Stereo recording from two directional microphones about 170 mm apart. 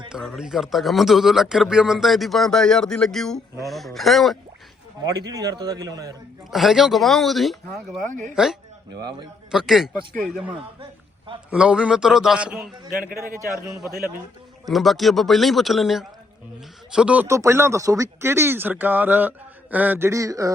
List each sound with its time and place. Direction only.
0.1 s speech: centre (ahead or behind)
5.0 s a man's voice: 20° right (ahead or behind)
6.5 s speech: centre (ahead or behind)
8.0 s speech: 50° right (ahead or behind)
9.0 s a man's voice: 25° right (ahead or behind)
9.5 s speech: centre (ahead or behind)
11.5 s speech: 5° right (ahead or behind)
14.7 s speech: centre (ahead or behind); by 20.5 s 20° right (ahead or behind)